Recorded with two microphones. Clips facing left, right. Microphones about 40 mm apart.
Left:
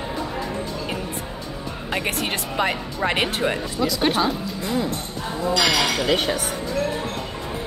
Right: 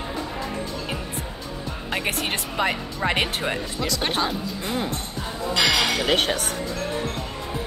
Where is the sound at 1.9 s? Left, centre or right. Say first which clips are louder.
Left 1 dB; centre.